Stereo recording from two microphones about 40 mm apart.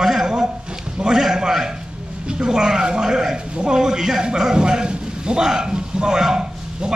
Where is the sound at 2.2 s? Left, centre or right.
Centre.